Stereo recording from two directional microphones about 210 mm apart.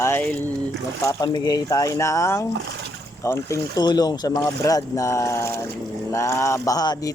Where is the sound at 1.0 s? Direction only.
20° left (ahead or behind).